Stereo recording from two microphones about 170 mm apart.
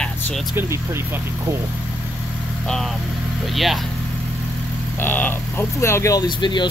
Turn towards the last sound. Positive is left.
turn(degrees=25)  # may be behind; listen again after turning